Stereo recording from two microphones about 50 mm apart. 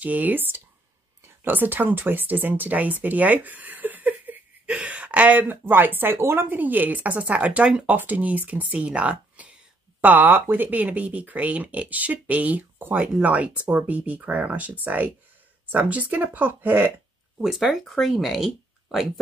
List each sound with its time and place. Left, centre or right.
0.0 s speech: right
10.0 s speech: right
17.4 s speech: centre